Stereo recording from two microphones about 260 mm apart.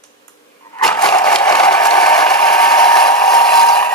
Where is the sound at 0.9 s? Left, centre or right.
Centre.